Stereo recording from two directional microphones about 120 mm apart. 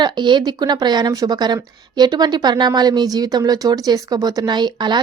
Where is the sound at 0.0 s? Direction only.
40° right (ahead or behind).